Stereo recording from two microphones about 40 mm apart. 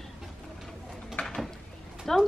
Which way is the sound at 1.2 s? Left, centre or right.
Centre.